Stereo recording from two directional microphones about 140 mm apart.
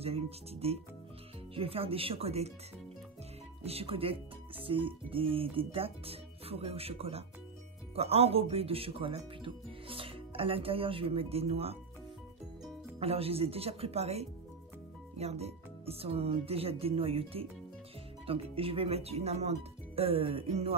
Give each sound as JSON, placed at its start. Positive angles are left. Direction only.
{"t": 0.0, "sound": "speech", "side_deg": -45}
{"t": 3.6, "sound": "speech", "side_deg": -45}
{"t": 13.0, "sound": "speech", "side_deg": -45}